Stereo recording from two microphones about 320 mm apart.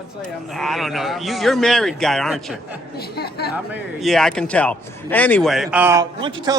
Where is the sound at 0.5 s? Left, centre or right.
Centre.